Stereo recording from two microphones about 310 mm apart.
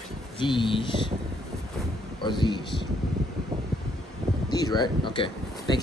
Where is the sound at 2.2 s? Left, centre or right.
Centre.